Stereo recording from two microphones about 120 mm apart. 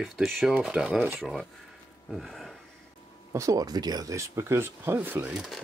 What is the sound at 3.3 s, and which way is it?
Speech, 25° right (ahead or behind).